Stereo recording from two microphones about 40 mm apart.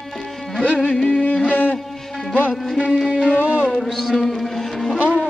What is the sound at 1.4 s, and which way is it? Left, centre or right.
Music, left.